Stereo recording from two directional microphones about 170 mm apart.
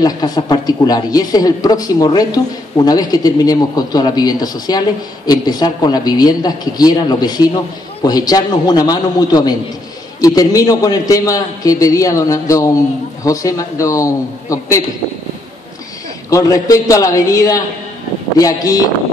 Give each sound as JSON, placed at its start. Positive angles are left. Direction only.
{"t": 0.0, "sound": "speech", "side_deg": 25}
{"t": 16.3, "sound": "speech", "side_deg": 20}